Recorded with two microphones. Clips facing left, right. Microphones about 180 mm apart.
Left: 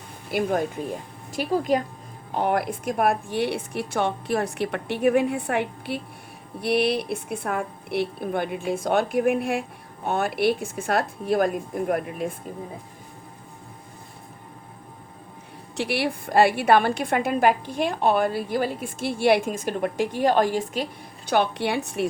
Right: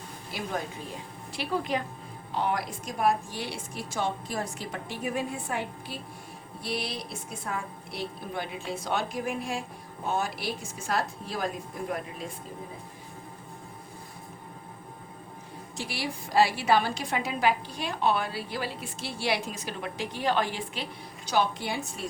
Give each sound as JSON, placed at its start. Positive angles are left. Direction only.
{"t": 0.3, "sound": "speech", "side_deg": 55}
{"t": 2.3, "sound": "a woman's voice", "side_deg": 55}
{"t": 15.8, "sound": "a woman's voice", "side_deg": 65}
{"t": 21.2, "sound": "a woman's voice", "side_deg": 65}